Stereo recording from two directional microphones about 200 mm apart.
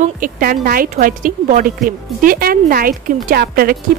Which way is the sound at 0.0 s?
45° right (ahead or behind).